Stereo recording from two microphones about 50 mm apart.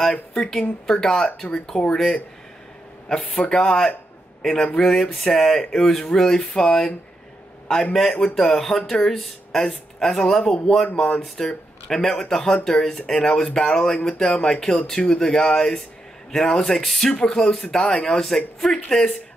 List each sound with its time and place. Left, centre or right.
0.1 s speech: centre
0.5 s speech: centre
3.1 s a man's voice: centre